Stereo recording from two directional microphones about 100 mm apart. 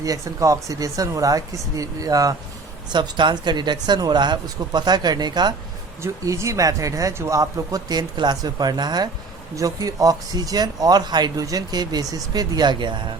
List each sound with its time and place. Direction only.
0.0 s speech: 35° right (ahead or behind)
2.9 s speech: 50° right (ahead or behind)
6.0 s speech: 30° right (ahead or behind); by 12.9 s 45° right (ahead or behind)